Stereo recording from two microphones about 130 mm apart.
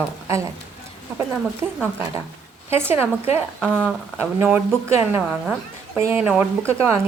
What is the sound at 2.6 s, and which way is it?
Speech, 20° right (ahead or behind).